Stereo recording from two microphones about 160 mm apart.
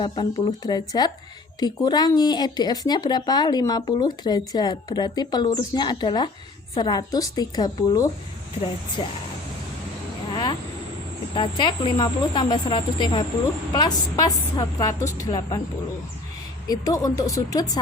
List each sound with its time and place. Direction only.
0.0 s speech: 25° left (ahead or behind)
10.3 s vehicle: 25° left (ahead or behind)
11.3 s speech: 30° left (ahead or behind)
16.6 s speech: 20° left (ahead or behind)